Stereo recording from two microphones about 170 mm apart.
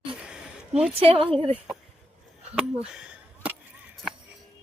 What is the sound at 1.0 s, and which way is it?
Speech, 35° right (ahead or behind).